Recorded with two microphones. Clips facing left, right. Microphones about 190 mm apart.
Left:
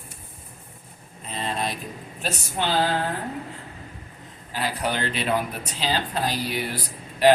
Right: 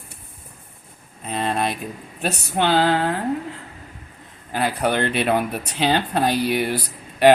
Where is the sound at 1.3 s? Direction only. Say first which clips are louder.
Right 5 dB; 60° right (ahead or behind).